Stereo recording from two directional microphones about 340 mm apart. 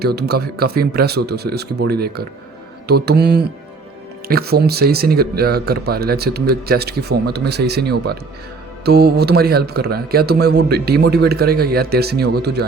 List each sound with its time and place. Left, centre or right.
0.0 s speech: right